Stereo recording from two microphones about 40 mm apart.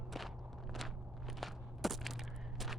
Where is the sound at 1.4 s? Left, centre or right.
Centre.